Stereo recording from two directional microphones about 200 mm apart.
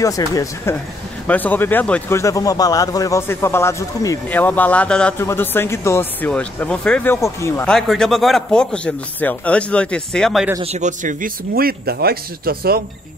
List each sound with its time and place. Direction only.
0.0 s speech: 15° left (ahead or behind); by 10.5 s centre (ahead or behind)
10.6 s speech: 35° right (ahead or behind); by 12.8 s 50° right (ahead or behind)